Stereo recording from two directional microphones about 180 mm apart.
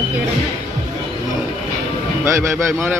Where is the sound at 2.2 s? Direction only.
10° right (ahead or behind).